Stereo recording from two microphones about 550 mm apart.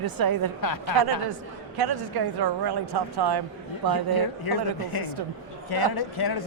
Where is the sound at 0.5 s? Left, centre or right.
Left.